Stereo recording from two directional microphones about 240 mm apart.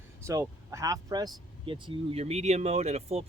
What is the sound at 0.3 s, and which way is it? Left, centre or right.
Speech, centre.